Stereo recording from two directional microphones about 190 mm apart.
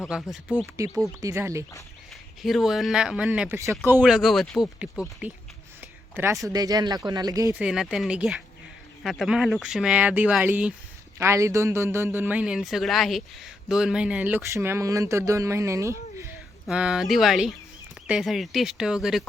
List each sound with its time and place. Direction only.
0.2 s speech: 10° left (ahead or behind)
0.8 s a man's voice: 15° right (ahead or behind)
2.4 s speech: centre (ahead or behind)
5.8 s a sound: 10° right (ahead or behind)
6.5 s speech: 20° right (ahead or behind)
7.6 s a man's voice: 5° right (ahead or behind)
16.6 s speech: 5° right (ahead or behind)